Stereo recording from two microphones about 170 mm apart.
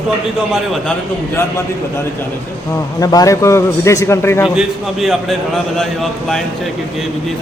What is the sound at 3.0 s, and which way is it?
A man's voice, 20° left (ahead or behind).